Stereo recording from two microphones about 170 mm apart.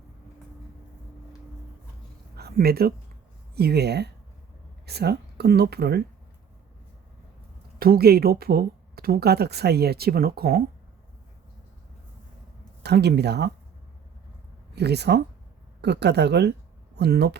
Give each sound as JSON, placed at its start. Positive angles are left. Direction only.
{"t": 2.3, "sound": "a sound", "side_deg": -65}
{"t": 3.5, "sound": "speech", "side_deg": -70}
{"t": 7.8, "sound": "speech", "side_deg": -65}
{"t": 12.8, "sound": "speech", "side_deg": -75}
{"t": 14.8, "sound": "speech", "side_deg": -80}